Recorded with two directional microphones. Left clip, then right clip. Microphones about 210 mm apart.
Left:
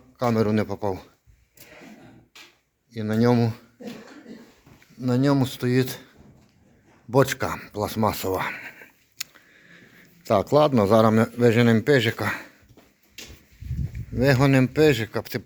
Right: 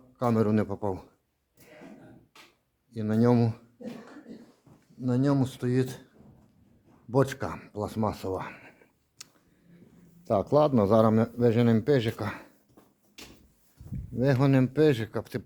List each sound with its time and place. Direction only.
0.2 s a man's voice: 10° right (ahead or behind)
2.9 s a man's voice: 5° right (ahead or behind)
4.9 s speech: 5° left (ahead or behind)
7.1 s speech: 5° left (ahead or behind)
10.2 s a man's voice: centre (ahead or behind)
14.4 s a man's voice: centre (ahead or behind)